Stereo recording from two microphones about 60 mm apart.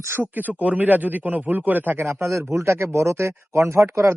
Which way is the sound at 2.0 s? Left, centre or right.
Right.